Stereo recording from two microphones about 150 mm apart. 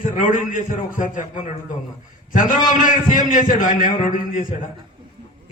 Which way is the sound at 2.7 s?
60° left (ahead or behind).